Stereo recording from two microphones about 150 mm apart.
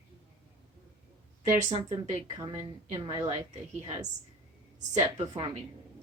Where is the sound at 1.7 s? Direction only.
50° right (ahead or behind).